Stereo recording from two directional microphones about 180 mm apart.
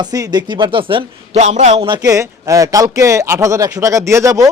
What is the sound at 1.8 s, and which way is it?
Speech, 25° right (ahead or behind).